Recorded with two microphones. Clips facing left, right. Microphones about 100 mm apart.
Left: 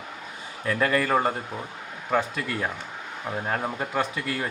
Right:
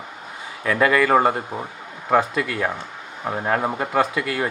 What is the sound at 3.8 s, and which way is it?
Speech, 75° right (ahead or behind).